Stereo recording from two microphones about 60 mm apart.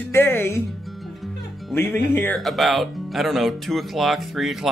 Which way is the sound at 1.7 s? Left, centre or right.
Left.